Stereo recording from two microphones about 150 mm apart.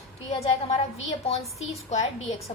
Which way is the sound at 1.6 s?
45° left (ahead or behind).